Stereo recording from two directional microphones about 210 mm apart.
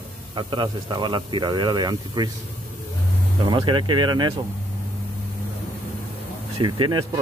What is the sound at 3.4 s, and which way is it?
Speech, 25° right (ahead or behind).